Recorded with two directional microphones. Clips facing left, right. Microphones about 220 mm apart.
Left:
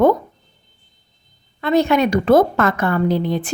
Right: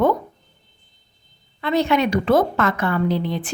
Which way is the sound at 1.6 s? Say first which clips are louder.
Left 3 dB; 45° left (ahead or behind).